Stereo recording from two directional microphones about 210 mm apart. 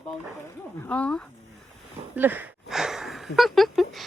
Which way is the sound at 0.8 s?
5° left (ahead or behind).